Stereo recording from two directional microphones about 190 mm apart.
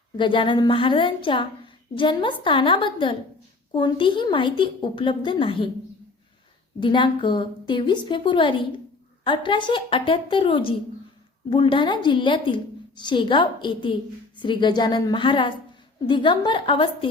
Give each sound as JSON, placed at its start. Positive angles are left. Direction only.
{"t": 0.2, "sound": "a woman's voice", "side_deg": 25}
{"t": 6.7, "sound": "a woman's voice", "side_deg": 25}